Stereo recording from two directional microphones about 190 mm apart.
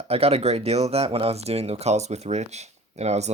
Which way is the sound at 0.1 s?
30° right (ahead or behind).